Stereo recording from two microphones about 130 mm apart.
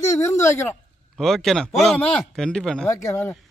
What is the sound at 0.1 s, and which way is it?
Speech, 20° left (ahead or behind).